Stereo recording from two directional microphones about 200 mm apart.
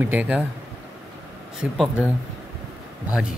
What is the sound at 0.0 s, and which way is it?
Speech, 10° right (ahead or behind).